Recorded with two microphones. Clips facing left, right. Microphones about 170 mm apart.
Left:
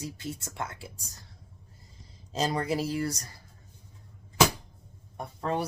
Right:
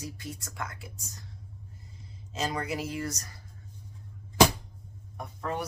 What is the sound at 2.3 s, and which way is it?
Speech, 35° left (ahead or behind).